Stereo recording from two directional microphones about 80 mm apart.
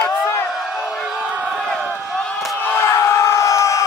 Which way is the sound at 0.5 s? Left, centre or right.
Centre.